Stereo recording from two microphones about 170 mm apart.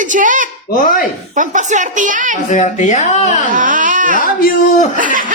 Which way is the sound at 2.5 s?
45° left (ahead or behind).